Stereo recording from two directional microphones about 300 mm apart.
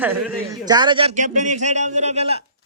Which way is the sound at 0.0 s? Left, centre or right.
Centre.